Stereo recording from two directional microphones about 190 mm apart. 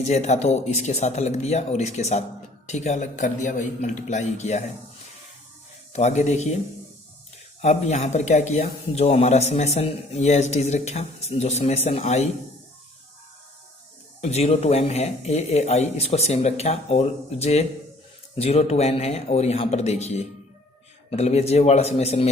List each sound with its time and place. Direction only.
0.0 s speech: 35° left (ahead or behind)
5.9 s speech: 35° left (ahead or behind)
7.6 s speech: 35° left (ahead or behind)
14.2 s speech: 35° left (ahead or behind)